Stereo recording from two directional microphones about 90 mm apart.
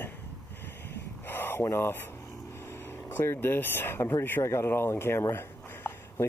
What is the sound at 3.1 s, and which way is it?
Speech, 25° left (ahead or behind).